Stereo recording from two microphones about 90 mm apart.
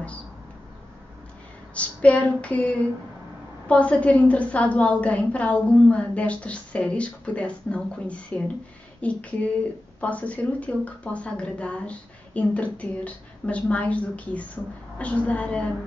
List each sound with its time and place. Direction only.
1.7 s female singing: 15° left (ahead or behind)
3.6 s a woman's voice: 10° left (ahead or behind)